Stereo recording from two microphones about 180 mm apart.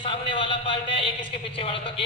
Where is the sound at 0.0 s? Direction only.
30° left (ahead or behind).